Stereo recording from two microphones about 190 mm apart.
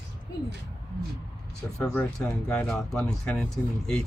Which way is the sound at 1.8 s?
5° left (ahead or behind).